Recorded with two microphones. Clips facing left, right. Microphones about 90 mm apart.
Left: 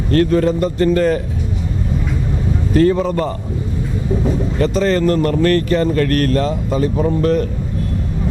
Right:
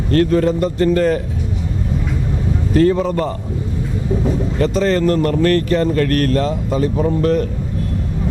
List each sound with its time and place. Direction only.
0.1 s speech: 15° left (ahead or behind)
2.7 s speech: 20° left (ahead or behind)
6.5 s speech: 30° left (ahead or behind)
7.2 s speech: 15° left (ahead or behind)